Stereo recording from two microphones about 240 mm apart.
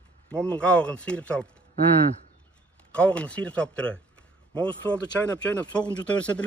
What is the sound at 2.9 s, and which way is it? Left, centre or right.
Speech, centre.